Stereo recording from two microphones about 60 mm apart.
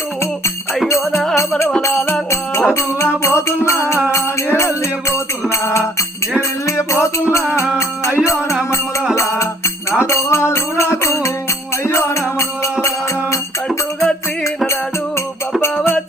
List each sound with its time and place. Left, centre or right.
0.9 s music: left
8.2 s music: left
10.1 s music: left
13.7 s music: centre